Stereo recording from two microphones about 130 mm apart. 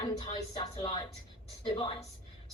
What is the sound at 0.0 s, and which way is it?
Speech, 30° left (ahead or behind).